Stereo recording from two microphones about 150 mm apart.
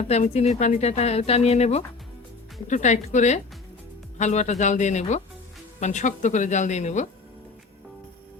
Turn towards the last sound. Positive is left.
turn(degrees=50)  # may be behind; listen again after turning